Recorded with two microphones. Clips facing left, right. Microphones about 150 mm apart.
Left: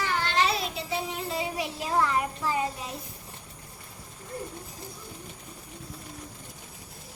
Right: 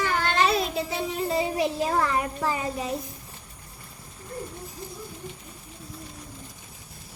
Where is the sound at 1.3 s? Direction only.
45° right (ahead or behind).